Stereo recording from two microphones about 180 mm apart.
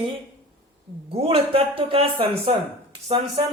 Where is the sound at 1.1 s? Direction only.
30° right (ahead or behind).